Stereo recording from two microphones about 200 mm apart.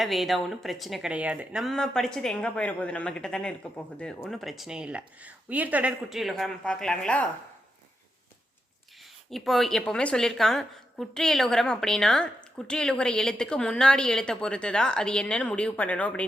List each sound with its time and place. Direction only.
0.0 s speech: centre (ahead or behind)
9.3 s speech: centre (ahead or behind)